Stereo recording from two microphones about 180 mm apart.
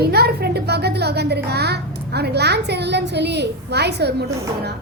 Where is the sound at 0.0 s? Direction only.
60° right (ahead or behind).